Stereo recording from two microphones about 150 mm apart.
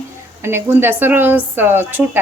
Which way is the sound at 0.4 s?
15° right (ahead or behind).